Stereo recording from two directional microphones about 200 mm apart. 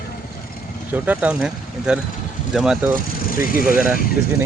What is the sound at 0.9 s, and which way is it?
Speech, 10° right (ahead or behind).